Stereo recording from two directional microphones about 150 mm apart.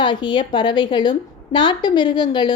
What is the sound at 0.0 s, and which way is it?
A woman's voice, 30° left (ahead or behind).